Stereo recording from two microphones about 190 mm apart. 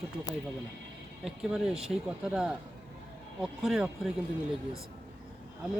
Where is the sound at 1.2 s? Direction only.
Centre (ahead or behind).